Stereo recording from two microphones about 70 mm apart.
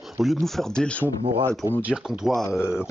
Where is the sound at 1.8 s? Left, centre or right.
Centre.